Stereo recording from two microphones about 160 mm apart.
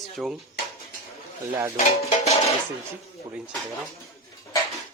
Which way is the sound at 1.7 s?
45° left (ahead or behind).